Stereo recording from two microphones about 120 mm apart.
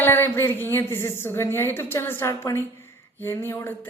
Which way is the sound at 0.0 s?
20° left (ahead or behind).